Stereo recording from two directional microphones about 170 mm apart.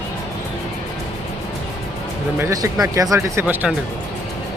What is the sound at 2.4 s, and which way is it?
Speech, 20° right (ahead or behind).